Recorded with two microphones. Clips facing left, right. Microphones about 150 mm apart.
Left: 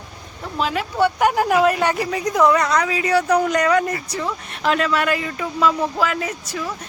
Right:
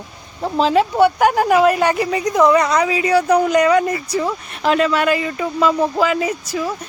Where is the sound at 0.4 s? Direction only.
30° right (ahead or behind).